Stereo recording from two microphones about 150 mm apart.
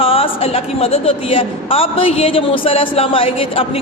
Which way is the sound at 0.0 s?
40° left (ahead or behind).